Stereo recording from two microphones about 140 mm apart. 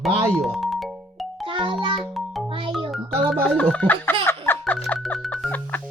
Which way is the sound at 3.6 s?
10° left (ahead or behind).